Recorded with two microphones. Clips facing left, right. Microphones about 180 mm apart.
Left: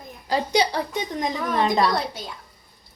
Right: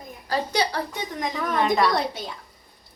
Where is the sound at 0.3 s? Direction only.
15° left (ahead or behind).